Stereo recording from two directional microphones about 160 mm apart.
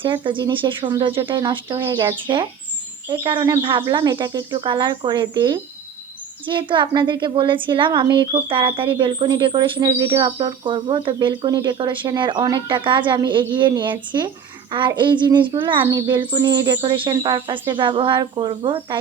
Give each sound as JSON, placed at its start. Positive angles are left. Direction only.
{"t": 0.0, "sound": "a woman's voice", "side_deg": -30}